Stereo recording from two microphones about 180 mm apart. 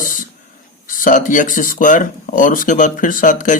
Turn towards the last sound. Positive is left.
turn(degrees=45)  # may be behind; listen again after turning